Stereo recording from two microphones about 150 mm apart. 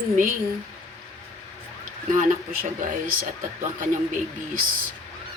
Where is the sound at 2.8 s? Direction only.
70° right (ahead or behind).